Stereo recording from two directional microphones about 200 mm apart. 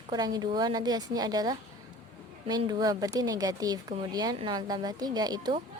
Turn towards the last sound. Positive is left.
turn(degrees=-20)  # may be behind; listen again after turning